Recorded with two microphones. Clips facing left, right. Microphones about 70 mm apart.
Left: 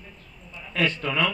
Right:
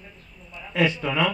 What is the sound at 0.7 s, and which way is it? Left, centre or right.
Mantra, centre.